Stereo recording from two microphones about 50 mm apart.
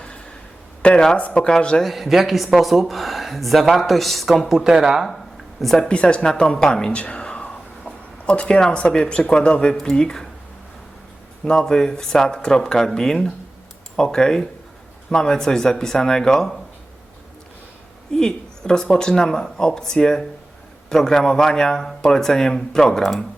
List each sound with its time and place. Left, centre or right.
0.8 s speech: centre
1.2 s speech: left
1.5 s speech: centre
1.8 s speech: centre
5.5 s speech: centre
5.9 s speech: left
6.9 s speech: left
11.6 s speech: centre
18.1 s speech: centre